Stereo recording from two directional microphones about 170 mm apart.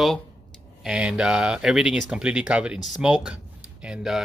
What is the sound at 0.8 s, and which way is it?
Speech, 5° right (ahead or behind).